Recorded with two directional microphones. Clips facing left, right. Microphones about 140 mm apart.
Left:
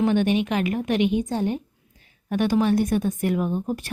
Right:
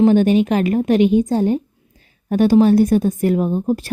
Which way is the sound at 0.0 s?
35° right (ahead or behind).